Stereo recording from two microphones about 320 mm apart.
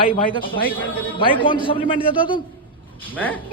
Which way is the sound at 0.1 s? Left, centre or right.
Centre.